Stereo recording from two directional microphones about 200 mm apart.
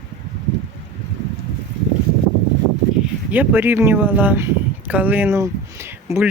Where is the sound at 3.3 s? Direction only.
10° right (ahead or behind).